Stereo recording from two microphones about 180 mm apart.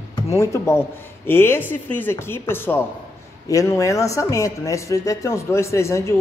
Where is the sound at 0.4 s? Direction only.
15° left (ahead or behind).